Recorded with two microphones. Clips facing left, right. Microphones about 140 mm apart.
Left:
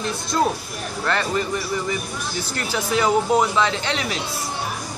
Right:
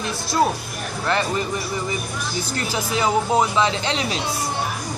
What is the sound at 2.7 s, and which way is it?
Speech, 15° right (ahead or behind).